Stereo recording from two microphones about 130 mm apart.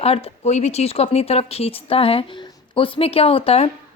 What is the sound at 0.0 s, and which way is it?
A woman's voice, 50° left (ahead or behind).